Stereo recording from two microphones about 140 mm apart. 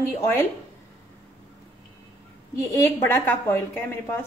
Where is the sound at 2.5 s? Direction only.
20° left (ahead or behind).